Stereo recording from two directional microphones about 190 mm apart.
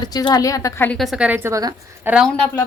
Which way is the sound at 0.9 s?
Centre (ahead or behind).